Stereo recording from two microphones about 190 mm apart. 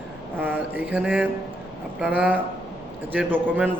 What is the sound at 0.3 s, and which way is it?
A man's voice, 10° right (ahead or behind).